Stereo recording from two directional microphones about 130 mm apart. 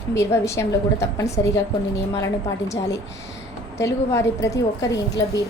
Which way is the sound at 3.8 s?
25° left (ahead or behind).